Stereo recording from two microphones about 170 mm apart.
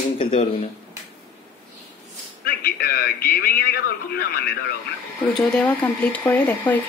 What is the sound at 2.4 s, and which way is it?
Radio, 60° left (ahead or behind).